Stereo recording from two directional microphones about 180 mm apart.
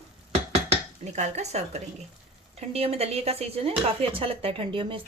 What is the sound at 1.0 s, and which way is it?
Speech, 40° right (ahead or behind).